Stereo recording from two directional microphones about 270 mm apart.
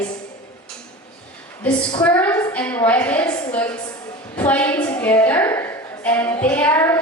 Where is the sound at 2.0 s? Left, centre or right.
Centre.